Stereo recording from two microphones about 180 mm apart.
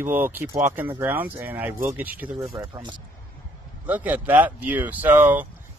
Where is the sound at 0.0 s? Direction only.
10° right (ahead or behind).